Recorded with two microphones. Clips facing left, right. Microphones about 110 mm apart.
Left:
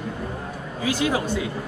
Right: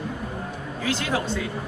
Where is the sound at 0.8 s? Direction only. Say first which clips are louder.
Left 3 dB; 10° left (ahead or behind).